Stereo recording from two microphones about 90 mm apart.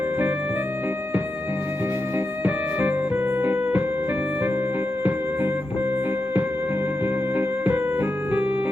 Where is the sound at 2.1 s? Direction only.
20° right (ahead or behind).